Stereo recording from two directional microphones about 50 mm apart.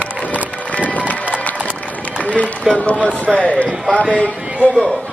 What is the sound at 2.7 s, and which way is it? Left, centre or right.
Speech, left.